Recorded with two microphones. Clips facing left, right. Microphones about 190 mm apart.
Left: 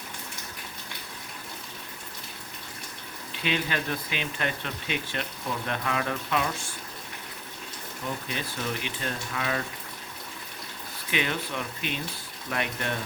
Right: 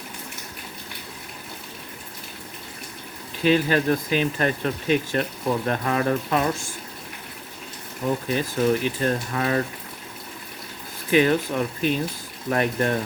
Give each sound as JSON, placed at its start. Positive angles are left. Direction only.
{"t": 3.4, "sound": "speech", "side_deg": -40}
{"t": 8.3, "sound": "speech", "side_deg": -45}
{"t": 11.1, "sound": "speech", "side_deg": -40}